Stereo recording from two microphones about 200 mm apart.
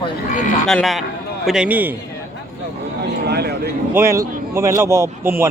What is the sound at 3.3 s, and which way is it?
Speech, 55° right (ahead or behind).